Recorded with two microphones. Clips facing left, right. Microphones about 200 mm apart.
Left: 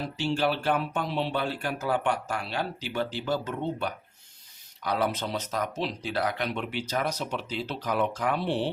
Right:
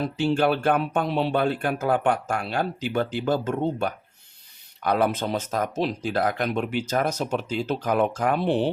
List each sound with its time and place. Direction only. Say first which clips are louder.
0.0 s speech: right 5 dB; 55° right (ahead or behind)